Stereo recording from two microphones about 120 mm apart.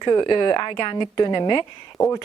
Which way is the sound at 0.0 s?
35° left (ahead or behind).